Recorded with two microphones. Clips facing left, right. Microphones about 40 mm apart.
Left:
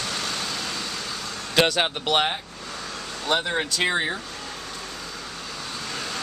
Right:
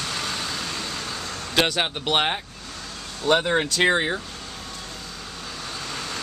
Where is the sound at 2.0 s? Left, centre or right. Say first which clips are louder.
Right 2 dB; centre.